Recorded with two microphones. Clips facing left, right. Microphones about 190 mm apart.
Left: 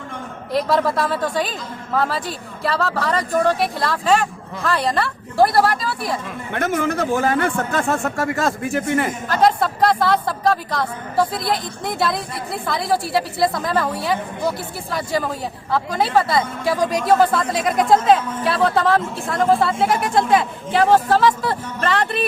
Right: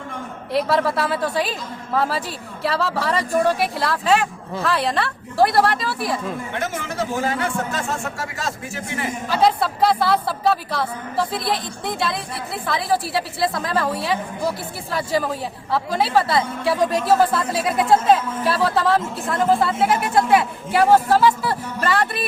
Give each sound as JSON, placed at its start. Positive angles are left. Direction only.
{"t": 0.5, "sound": "a woman's voice", "side_deg": -5}
{"t": 6.5, "sound": "a man's voice", "side_deg": 55}
{"t": 9.3, "sound": "a woman's voice", "side_deg": -5}